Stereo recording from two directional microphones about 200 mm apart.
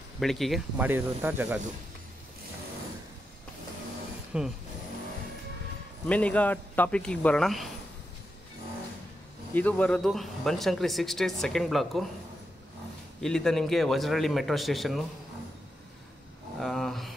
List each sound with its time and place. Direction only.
0.2 s speech: centre (ahead or behind)
4.3 s speech: 5° right (ahead or behind)
6.0 s speech: 5° left (ahead or behind)
9.5 s speech: 10° left (ahead or behind)
13.2 s speech: 5° left (ahead or behind)
16.5 s a sound: centre (ahead or behind)